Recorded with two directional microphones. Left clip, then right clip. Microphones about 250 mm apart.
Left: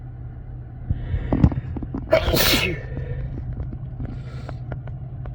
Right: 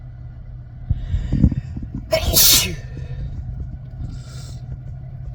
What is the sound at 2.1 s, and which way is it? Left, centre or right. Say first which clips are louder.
Sneeze: right 2 dB; centre.